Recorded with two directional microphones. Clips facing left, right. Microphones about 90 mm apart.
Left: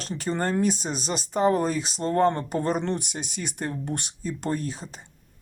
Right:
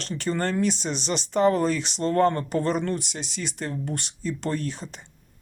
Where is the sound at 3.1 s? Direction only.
50° left (ahead or behind).